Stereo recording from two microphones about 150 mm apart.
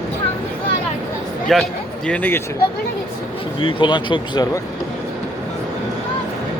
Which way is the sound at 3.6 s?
35° left (ahead or behind).